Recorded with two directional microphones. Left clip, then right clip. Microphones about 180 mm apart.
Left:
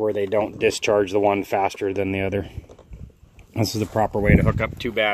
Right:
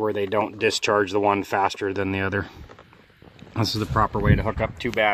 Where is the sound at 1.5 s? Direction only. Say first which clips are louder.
Left 1 dB; 35° right (ahead or behind).